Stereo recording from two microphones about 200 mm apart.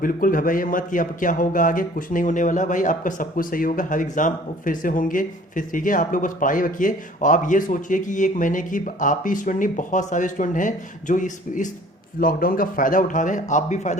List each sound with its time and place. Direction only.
0.0 s a man's voice: 45° left (ahead or behind)